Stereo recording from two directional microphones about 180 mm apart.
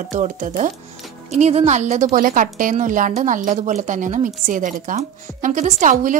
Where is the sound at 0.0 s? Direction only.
45° right (ahead or behind).